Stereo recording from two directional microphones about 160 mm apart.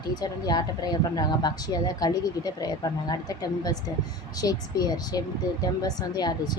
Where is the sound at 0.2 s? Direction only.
25° left (ahead or behind).